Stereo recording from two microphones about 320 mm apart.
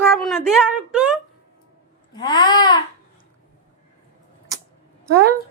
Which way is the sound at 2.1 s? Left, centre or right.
Centre.